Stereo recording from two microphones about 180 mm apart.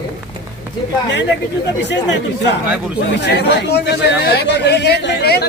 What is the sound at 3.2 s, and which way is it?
A man's voice, 65° left (ahead or behind).